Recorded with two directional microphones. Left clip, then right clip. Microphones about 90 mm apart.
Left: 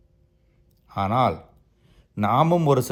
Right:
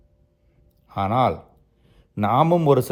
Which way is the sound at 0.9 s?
35° right (ahead or behind).